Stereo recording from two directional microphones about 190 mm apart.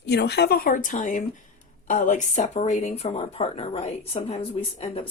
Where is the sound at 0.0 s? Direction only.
65° left (ahead or behind).